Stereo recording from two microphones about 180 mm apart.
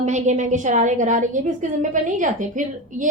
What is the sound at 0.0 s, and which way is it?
A woman's voice, 40° right (ahead or behind).